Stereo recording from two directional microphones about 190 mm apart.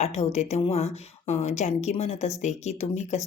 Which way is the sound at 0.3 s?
35° left (ahead or behind).